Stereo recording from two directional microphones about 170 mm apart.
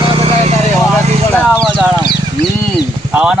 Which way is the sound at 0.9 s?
10° left (ahead or behind).